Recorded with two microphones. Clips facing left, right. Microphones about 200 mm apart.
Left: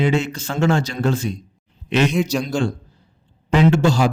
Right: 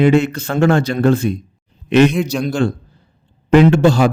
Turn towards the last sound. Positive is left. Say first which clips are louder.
# right 5 dB
turn(degrees=-60)  # may be behind; listen again after turning